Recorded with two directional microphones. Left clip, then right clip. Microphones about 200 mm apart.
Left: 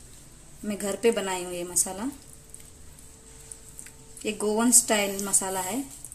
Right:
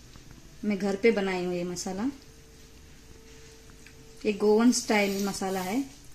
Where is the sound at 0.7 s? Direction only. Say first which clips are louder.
Even; 20° right (ahead or behind).